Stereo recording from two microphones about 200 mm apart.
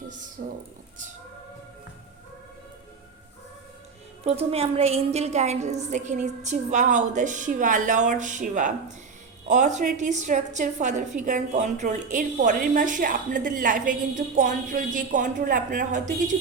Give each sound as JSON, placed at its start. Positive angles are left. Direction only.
{"t": 0.4, "sound": "speech", "side_deg": -45}
{"t": 4.3, "sound": "a woman's voice", "side_deg": -30}